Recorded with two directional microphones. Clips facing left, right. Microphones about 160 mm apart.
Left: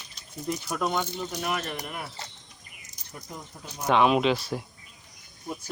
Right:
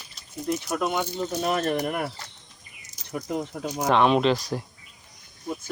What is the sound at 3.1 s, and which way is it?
Speech, 80° right.